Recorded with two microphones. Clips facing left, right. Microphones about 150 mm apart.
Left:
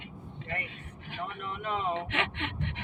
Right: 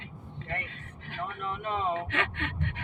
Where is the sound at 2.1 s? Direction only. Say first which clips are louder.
Right 1 dB; 20° left (ahead or behind).